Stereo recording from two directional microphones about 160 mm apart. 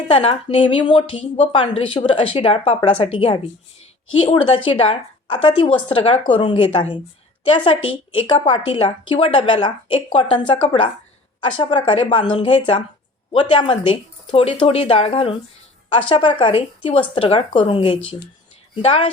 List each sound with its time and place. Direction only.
0.1 s speech: 35° left (ahead or behind)
8.1 s speech: 30° left (ahead or behind)